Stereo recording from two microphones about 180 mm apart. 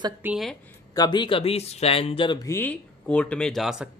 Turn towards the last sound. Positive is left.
turn(degrees=0)  # may be behind; listen again after turning